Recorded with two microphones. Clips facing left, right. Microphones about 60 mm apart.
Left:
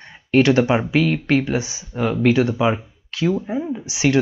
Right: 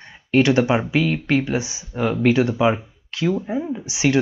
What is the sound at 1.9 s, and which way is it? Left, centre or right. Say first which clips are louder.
Speech: left 1 dB; centre.